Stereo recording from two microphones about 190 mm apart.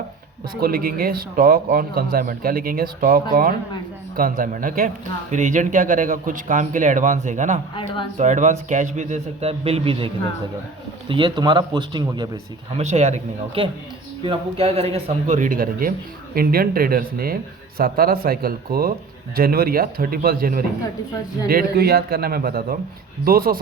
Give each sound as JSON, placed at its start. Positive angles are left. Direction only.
{"t": 0.5, "sound": "a man's voice", "side_deg": -50}
{"t": 11.1, "sound": "speech", "side_deg": -25}
{"t": 12.8, "sound": "speech", "side_deg": -35}
{"t": 15.4, "sound": "a man's voice", "side_deg": -45}